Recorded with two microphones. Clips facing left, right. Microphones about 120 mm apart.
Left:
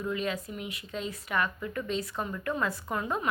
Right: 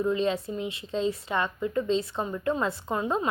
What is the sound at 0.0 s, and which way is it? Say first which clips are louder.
A woman's voice: right 6 dB; 25° right (ahead or behind).